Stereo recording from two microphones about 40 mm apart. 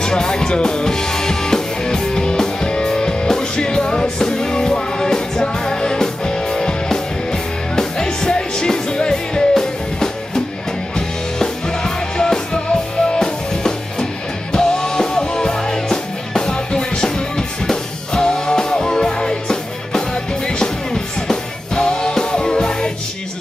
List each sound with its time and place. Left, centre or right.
0.0 s music: centre